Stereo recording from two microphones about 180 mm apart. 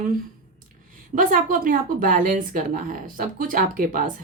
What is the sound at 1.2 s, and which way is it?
A woman's voice, 50° right (ahead or behind).